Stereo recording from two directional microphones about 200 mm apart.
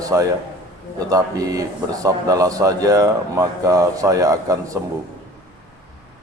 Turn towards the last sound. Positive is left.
turn(degrees=-15)  # may be behind; listen again after turning